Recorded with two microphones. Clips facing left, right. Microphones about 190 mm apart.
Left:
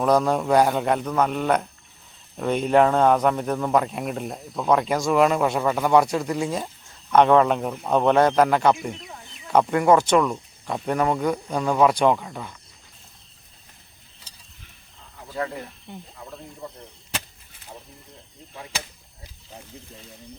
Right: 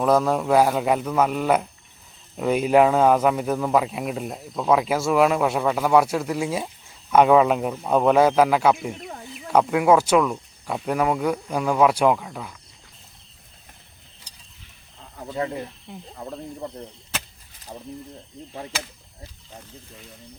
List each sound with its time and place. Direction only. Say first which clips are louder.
0.0 s speech: even; centre (ahead or behind)
15.4 s speech: right 2 dB; 25° right (ahead or behind)
15.9 s speech: even; centre (ahead or behind)